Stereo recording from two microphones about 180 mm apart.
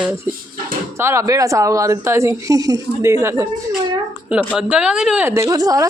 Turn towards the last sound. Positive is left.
turn(degrees=-20)  # may be behind; listen again after turning